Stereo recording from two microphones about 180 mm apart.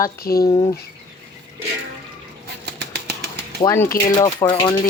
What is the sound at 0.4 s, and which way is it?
Speech, 20° left (ahead or behind).